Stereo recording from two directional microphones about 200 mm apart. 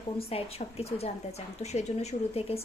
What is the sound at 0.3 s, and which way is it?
A woman's voice, 30° left (ahead or behind).